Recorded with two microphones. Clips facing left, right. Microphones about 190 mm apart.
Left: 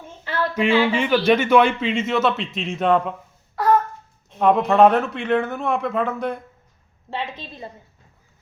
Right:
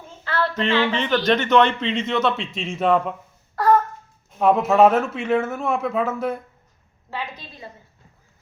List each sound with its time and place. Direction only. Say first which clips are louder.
0.3 s speech: left 2 dB; 15° left (ahead or behind); by 6.4 s 5° right (ahead or behind)
7.1 s a woman's voice: left 3 dB; 25° left (ahead or behind)